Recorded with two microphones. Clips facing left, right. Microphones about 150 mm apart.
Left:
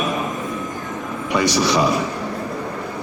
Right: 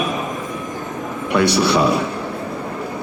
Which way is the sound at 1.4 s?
60° right (ahead or behind).